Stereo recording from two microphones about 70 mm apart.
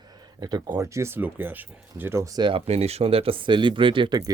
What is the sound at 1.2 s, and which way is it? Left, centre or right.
Speech, right.